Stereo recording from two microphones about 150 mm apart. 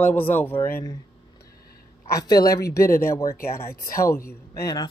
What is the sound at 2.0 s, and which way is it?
A woman's voice, 25° left (ahead or behind).